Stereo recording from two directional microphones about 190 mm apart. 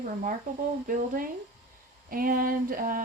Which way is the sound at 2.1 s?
50° right (ahead or behind).